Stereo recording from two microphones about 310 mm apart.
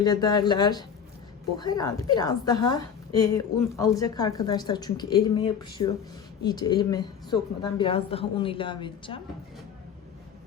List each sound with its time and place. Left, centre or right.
0.0 s a woman's voice: centre